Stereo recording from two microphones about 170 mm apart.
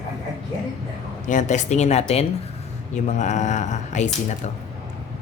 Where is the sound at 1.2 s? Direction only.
45° left (ahead or behind).